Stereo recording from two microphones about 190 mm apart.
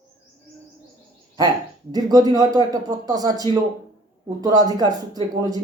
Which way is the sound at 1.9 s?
20° right (ahead or behind).